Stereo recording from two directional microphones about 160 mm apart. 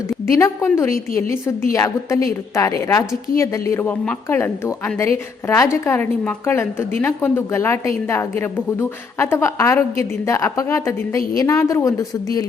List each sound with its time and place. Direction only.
0.3 s a woman's voice: 15° left (ahead or behind)